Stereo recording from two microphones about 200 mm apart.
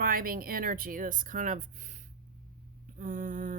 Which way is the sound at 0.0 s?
45° right (ahead or behind).